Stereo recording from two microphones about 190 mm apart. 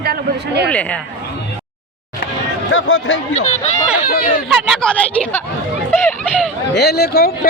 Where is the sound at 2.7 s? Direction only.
90° left.